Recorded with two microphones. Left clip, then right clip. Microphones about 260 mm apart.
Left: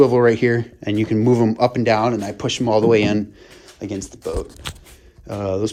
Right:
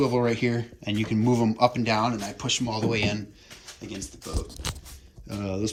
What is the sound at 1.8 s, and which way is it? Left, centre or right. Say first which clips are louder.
Speech: left 8 dB; left.